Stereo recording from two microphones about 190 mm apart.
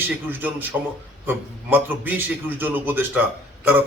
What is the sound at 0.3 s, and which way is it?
A man's voice, 10° right (ahead or behind).